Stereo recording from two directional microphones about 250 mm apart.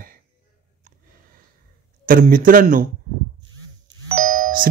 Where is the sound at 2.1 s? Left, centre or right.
Right.